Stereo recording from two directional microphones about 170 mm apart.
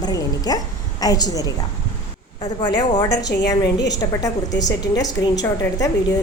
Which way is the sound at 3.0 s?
90° left.